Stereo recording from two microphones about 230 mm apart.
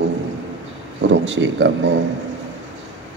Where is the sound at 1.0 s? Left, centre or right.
Right.